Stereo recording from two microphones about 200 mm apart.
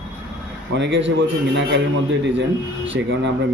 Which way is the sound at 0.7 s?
65° right (ahead or behind).